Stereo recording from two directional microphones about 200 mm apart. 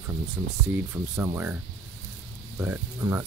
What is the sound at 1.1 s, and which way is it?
Speech, 10° right (ahead or behind).